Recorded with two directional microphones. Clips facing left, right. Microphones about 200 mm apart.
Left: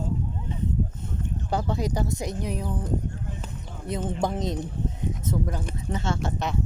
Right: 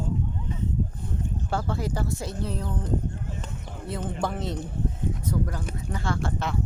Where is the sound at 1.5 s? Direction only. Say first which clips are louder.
Left 3 dB; 20° left (ahead or behind).